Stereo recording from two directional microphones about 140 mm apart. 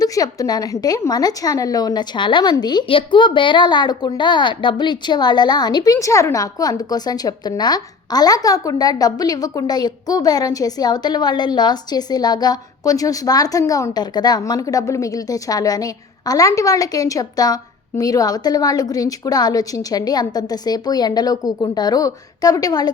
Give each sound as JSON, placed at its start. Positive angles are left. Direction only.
{"t": 0.0, "sound": "a woman's voice", "side_deg": 25}